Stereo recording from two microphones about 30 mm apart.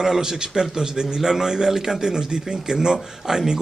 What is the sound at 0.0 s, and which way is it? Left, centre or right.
A man's voice, centre.